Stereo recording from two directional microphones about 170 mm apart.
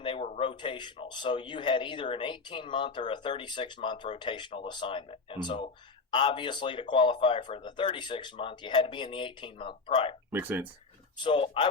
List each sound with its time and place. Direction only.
0.0 s speech: 30° left (ahead or behind)
10.3 s speech: 10° right (ahead or behind)
11.2 s speech: 30° left (ahead or behind)